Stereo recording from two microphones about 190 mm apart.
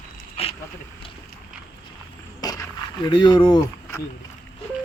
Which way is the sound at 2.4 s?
20° left (ahead or behind).